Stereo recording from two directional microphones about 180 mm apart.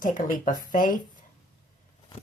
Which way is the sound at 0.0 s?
45° left (ahead or behind).